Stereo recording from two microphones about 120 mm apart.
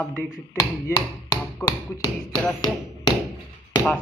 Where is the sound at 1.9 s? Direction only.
35° left (ahead or behind).